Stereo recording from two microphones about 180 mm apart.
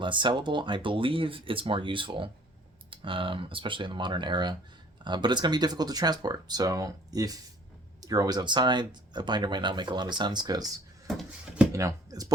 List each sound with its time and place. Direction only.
0.0 s speech: 25° right (ahead or behind)
11.2 s a sound: 5° right (ahead or behind)
11.7 s speech: 15° right (ahead or behind)